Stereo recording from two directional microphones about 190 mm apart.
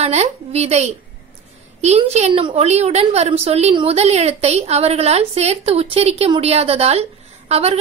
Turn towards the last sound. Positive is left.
turn(degrees=-35)  # may be behind; listen again after turning